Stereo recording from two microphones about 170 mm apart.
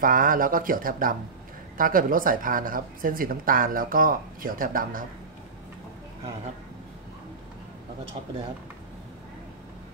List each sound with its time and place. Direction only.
0.0 s speech: 55° right (ahead or behind)